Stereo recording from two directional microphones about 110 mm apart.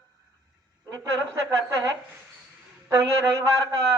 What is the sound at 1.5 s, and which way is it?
Speech, 30° right (ahead or behind).